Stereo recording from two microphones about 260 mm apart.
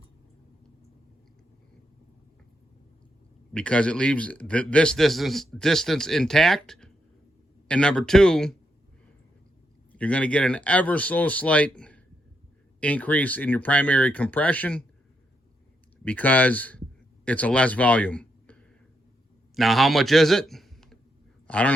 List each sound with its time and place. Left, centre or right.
3.5 s a man's voice: centre
9.9 s a man's voice: centre
16.0 s a man's voice: centre